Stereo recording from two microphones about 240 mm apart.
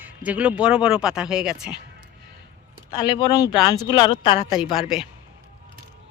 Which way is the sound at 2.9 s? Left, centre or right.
Centre.